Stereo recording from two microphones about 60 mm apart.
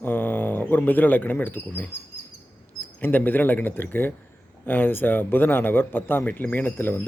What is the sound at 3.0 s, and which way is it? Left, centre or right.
Speech, left.